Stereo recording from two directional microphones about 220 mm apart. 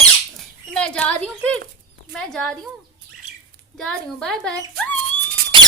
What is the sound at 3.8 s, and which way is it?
Speech, centre (ahead or behind).